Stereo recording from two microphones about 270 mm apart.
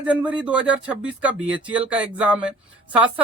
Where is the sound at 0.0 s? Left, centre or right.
Centre.